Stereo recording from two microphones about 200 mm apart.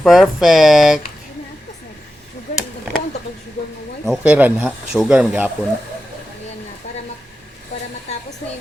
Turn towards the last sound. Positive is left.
turn(degrees=35)  # may be behind; listen again after turning